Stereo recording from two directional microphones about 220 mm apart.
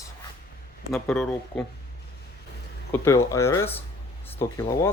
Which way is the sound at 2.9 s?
10° left (ahead or behind).